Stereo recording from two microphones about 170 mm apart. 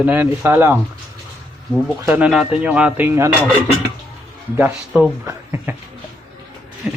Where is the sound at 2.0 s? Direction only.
15° right (ahead or behind).